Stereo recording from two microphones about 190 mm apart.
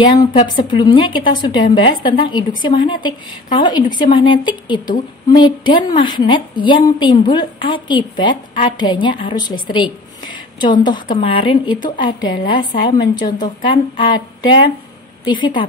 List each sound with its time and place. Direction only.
0.0 s a woman's voice: 25° left (ahead or behind)